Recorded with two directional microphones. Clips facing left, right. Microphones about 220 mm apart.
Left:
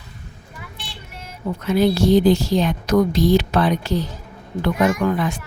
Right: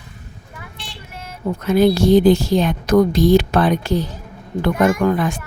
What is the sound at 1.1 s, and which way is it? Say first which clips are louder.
Speech: right 3 dB; 55° right (ahead or behind).